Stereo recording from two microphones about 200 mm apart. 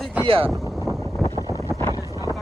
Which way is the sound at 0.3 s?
25° right (ahead or behind).